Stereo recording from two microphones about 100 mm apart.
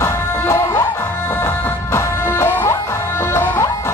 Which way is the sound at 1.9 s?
20° left (ahead or behind).